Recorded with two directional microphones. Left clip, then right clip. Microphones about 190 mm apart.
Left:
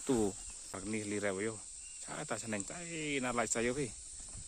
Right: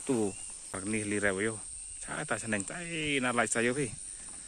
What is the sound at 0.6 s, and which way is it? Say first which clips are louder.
Speech: right 6 dB; 5° left (ahead or behind).